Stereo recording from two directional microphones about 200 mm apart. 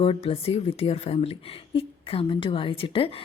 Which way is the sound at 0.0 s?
30° left (ahead or behind).